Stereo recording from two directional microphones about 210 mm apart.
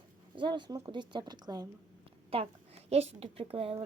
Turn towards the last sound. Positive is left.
turn(degrees=-30)  # may be behind; listen again after turning